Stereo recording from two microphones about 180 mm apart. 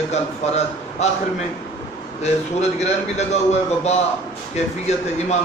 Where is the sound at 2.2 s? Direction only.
35° left (ahead or behind).